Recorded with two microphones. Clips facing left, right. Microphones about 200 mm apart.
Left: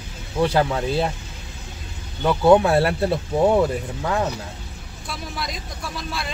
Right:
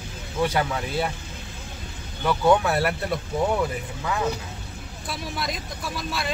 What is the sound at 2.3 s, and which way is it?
Speech, 25° left (ahead or behind).